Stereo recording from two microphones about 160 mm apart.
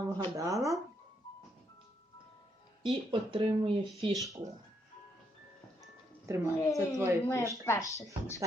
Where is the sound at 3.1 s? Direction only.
35° right (ahead or behind).